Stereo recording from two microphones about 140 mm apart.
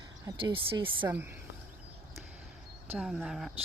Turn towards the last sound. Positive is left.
turn(degrees=0)  # may be behind; listen again after turning